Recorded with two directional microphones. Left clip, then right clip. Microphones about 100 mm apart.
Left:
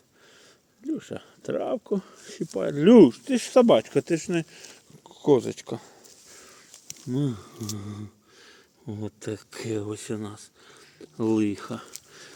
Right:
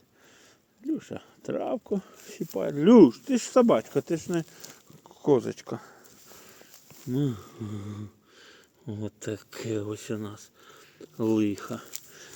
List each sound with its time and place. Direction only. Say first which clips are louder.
0.9 s speech: even; 20° left (ahead or behind); by 4.8 s 45° left (ahead or behind)
5.0 s speech: left 2 dB; 20° left (ahead or behind)
7.1 s speech: left 1 dB; 20° left (ahead or behind)